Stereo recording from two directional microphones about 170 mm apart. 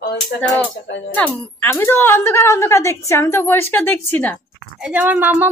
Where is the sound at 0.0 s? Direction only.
70° left (ahead or behind).